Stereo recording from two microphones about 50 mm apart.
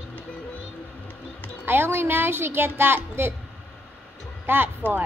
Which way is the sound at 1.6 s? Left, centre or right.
Right.